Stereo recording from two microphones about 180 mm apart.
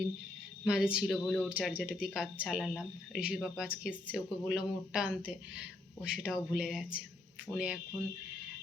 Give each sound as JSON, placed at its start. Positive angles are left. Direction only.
{"t": 0.6, "sound": "speech", "side_deg": -5}